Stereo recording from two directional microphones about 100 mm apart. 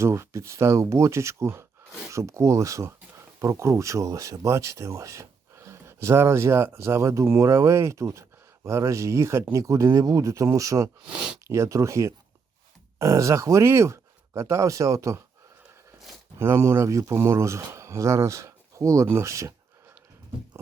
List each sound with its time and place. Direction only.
0.0 s speech: 30° right (ahead or behind)
11.0 s speech: 10° right (ahead or behind)
11.4 s speech: 30° right (ahead or behind)
16.4 s speech: 25° right (ahead or behind)